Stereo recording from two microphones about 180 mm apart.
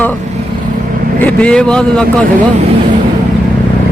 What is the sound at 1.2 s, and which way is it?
Speech, 10° left (ahead or behind).